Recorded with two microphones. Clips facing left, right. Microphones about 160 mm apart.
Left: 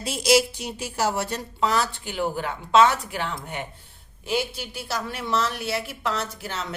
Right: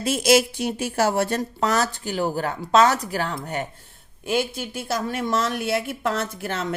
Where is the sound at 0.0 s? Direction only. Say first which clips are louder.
Right 2 dB; 50° right (ahead or behind).